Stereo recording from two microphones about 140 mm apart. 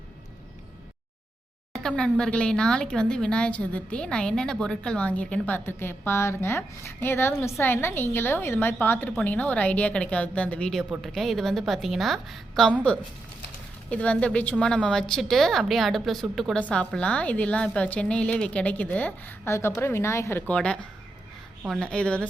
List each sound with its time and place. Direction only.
1.7 s a woman's voice: 5° left (ahead or behind)
13.9 s a woman's voice: 10° left (ahead or behind)
20.5 s speech: 5° left (ahead or behind)